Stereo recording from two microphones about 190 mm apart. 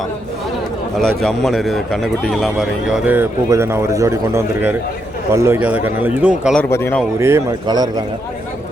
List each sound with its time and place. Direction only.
0.9 s a man's voice: centre (ahead or behind)
6.6 s speech: 15° left (ahead or behind)
7.2 s speech: 15° right (ahead or behind)